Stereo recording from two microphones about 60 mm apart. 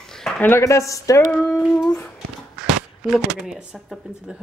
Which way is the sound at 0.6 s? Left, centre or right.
Left.